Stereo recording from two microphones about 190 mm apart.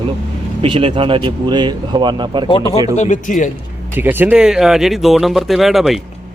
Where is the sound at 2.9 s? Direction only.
40° left (ahead or behind).